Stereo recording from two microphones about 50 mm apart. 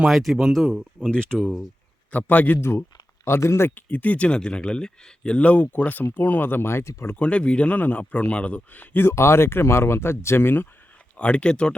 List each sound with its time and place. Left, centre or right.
0.1 s speech: centre
1.1 s speech: left
1.4 s speech: centre
2.1 s speech: left
2.6 s speech: left
3.8 s speech: left
6.7 s speech: left
7.2 s speech: left
7.8 s speech: left
9.0 s speech: left
11.2 s speech: left